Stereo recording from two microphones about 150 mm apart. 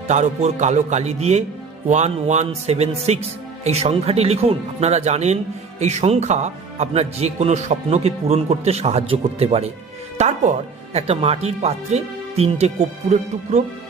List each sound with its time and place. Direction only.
0.1 s speech: 50° right (ahead or behind)